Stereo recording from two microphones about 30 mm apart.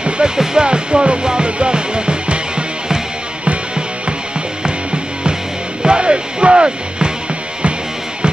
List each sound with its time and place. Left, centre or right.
0.2 s music: right
5.8 s music: right